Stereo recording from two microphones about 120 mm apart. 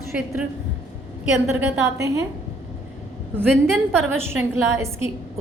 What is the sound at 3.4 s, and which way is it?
A woman's voice, 20° right (ahead or behind).